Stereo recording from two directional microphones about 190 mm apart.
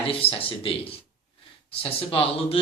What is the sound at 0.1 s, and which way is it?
A man's voice, 30° left (ahead or behind).